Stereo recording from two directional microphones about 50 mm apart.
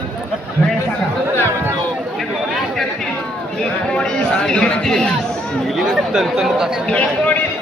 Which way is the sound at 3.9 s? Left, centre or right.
Left.